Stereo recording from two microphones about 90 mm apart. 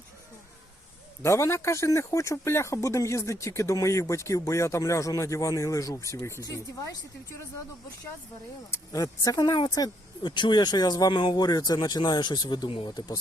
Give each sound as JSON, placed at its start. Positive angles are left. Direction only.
{"t": 1.2, "sound": "speech", "side_deg": 35}
{"t": 8.7, "sound": "speech", "side_deg": 40}